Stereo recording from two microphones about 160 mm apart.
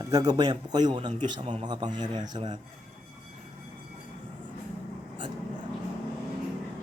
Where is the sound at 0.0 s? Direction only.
20° right (ahead or behind).